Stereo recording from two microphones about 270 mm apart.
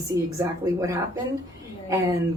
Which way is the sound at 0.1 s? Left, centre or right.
Centre.